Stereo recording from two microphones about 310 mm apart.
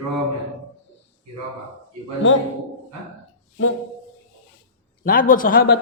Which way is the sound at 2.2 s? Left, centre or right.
Left.